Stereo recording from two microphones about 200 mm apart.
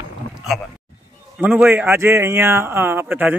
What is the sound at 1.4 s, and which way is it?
A man's voice, 10° right (ahead or behind).